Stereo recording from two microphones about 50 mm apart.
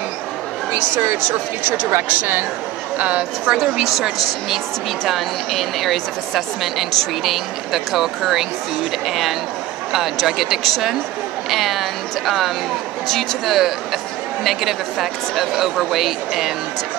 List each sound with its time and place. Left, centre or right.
3.0 s a woman's voice: right
3.5 s a woman's voice: centre
14.4 s speech: centre